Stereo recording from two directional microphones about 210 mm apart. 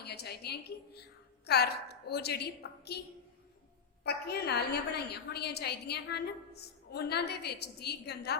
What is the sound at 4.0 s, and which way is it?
A woman's voice, 50° left (ahead or behind).